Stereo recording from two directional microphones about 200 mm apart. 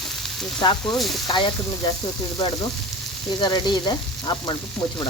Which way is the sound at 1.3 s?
25° left (ahead or behind).